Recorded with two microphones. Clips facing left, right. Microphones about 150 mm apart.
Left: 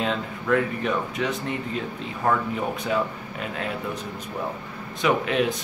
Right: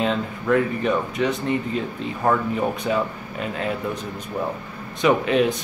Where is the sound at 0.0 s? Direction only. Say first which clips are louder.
Right 4 dB; centre (ahead or behind).